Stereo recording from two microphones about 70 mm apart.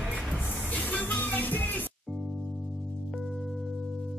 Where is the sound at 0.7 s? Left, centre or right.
Left.